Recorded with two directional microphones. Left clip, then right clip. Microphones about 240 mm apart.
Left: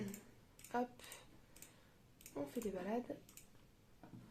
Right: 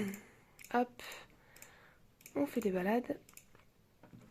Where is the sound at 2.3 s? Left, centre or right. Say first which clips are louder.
Right 9 dB; right.